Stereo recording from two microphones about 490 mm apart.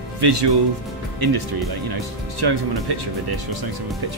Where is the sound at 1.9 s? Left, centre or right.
Right.